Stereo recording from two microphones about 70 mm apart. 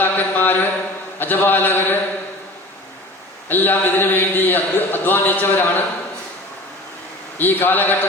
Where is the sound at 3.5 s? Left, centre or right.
Left.